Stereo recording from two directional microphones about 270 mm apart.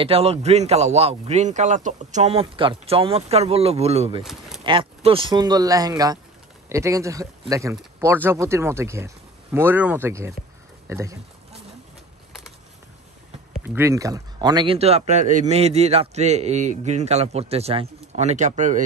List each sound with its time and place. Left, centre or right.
0.0 s speech: right
4.2 s speech: centre
4.6 s speech: centre
13.5 s speech: centre; by 18.8 s right